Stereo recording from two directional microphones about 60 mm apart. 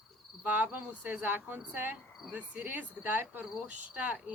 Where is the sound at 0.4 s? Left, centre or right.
Right.